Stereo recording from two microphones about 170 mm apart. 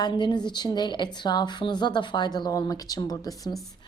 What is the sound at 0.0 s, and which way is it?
A woman's voice, 25° left (ahead or behind).